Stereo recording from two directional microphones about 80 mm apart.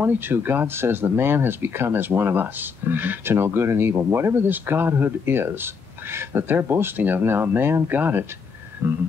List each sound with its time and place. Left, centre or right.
0.0 s speech: right